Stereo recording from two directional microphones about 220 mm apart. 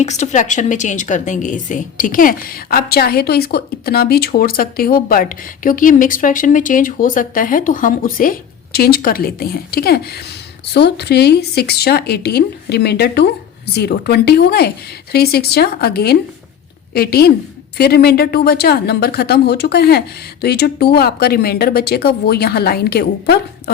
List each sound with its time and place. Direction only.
0.0 s a woman's voice: 30° left (ahead or behind)